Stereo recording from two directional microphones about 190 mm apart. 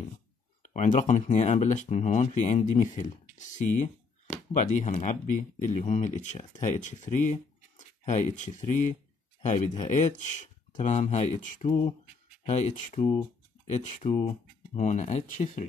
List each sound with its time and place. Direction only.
0.6 s speech: 40° left (ahead or behind)